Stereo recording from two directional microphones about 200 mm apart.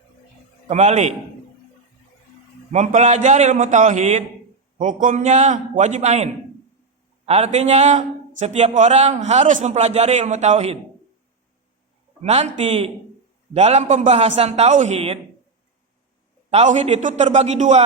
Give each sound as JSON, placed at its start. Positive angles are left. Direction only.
{"t": 0.7, "sound": "a man's voice", "side_deg": -35}
{"t": 2.7, "sound": "a man's voice", "side_deg": -35}
{"t": 12.2, "sound": "a man's voice", "side_deg": -30}
{"t": 16.5, "sound": "a man's voice", "side_deg": -35}